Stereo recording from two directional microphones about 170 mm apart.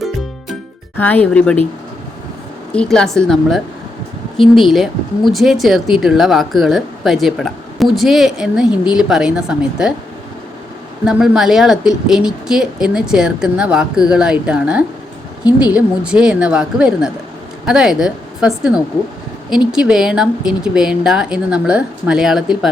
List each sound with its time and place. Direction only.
0.9 s speech: 10° left (ahead or behind)
2.7 s speech: 5° left (ahead or behind)
11.0 s speech: 5° right (ahead or behind)